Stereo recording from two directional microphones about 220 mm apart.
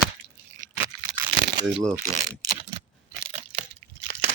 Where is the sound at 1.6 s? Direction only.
Centre (ahead or behind).